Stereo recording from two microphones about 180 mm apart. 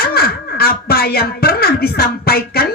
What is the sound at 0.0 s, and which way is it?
Speech, 60° left (ahead or behind).